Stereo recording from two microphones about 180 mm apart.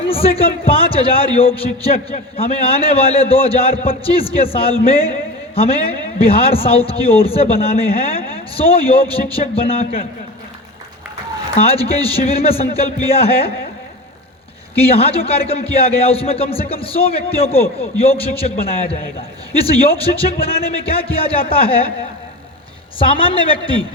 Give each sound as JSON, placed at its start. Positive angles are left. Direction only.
{"t": 0.1, "sound": "a man's voice", "side_deg": 30}
{"t": 11.5, "sound": "a man's voice", "side_deg": 30}
{"t": 14.8, "sound": "a man's voice", "side_deg": 35}
{"t": 23.0, "sound": "a woman's voice", "side_deg": 30}